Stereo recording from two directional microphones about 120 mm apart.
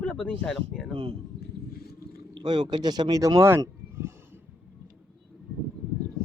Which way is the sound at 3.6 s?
20° right (ahead or behind).